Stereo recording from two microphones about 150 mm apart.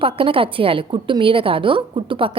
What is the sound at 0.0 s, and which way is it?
A woman's voice, 35° right (ahead or behind).